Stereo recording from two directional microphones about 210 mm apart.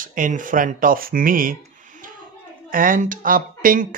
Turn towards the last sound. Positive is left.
turn(degrees=-40)  # may be behind; listen again after turning